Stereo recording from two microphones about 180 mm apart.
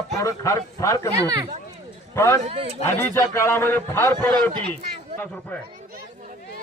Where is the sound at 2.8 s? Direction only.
15° left (ahead or behind).